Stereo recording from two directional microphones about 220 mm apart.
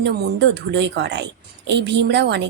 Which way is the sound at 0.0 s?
55° right (ahead or behind).